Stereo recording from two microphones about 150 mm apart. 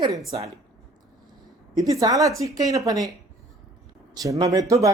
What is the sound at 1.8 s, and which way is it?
Speech, 25° right (ahead or behind).